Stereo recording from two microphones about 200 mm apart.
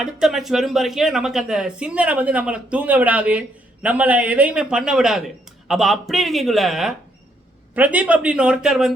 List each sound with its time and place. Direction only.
0.0 s a man's voice: centre (ahead or behind)